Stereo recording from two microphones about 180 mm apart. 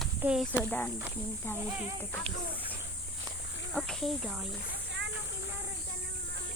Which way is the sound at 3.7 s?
Centre (ahead or behind).